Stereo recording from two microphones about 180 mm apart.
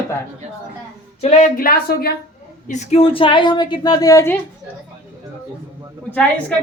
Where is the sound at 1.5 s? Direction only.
55° left (ahead or behind).